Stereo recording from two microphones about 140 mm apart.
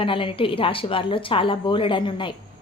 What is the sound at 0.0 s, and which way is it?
A woman's voice, 40° left (ahead or behind).